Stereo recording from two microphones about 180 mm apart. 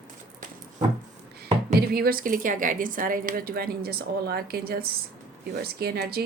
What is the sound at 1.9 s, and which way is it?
A woman's voice, 55° right (ahead or behind).